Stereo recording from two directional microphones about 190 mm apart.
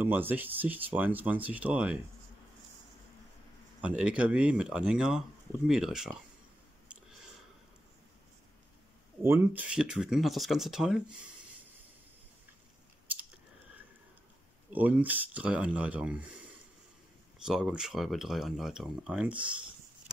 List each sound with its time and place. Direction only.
0.0 s speech: 10° right (ahead or behind)
3.8 s speech: 5° right (ahead or behind)
9.2 s speech: 10° right (ahead or behind)
14.7 s speech: 10° right (ahead or behind)
17.5 s speech: 5° right (ahead or behind)